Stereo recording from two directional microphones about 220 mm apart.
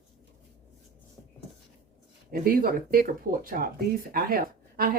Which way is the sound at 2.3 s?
40° right (ahead or behind).